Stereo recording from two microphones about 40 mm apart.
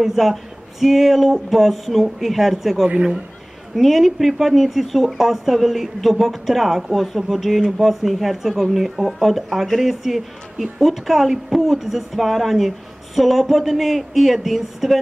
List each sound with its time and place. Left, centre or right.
0.0 s speech: centre
2.9 s a man's voice: right
3.7 s speech: centre